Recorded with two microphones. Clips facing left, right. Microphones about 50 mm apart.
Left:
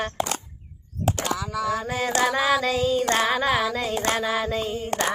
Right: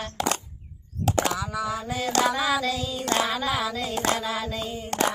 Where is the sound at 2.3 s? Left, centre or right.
Left.